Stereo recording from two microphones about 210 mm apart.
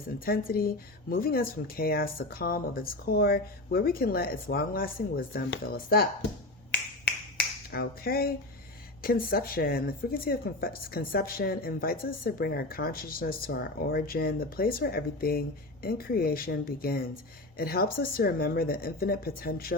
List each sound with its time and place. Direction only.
0.3 s speech: 45° left (ahead or behind)
7.7 s speech: 45° left (ahead or behind)